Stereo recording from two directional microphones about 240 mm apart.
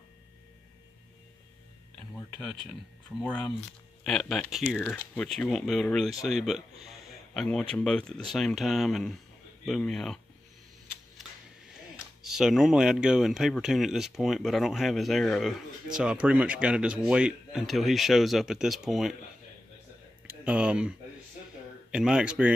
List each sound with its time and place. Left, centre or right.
3.1 s speech: centre
12.2 s speech: centre
20.2 s speech: centre
21.9 s speech: centre